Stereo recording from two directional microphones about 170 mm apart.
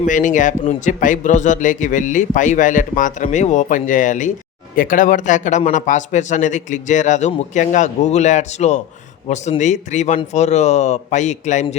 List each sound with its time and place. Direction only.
0.0 s a man's voice: 50° left (ahead or behind)